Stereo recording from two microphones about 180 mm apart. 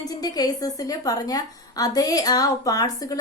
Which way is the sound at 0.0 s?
20° left (ahead or behind).